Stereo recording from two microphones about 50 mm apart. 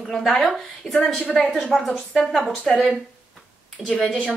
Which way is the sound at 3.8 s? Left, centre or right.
Centre.